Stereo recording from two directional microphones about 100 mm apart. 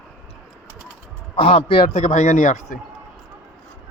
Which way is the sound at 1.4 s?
80° left.